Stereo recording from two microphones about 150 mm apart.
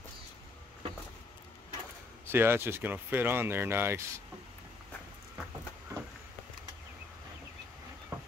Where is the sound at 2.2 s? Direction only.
15° right (ahead or behind).